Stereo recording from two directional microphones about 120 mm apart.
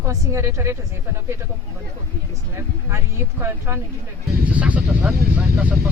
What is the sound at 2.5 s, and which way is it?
A woman's voice, 25° right (ahead or behind).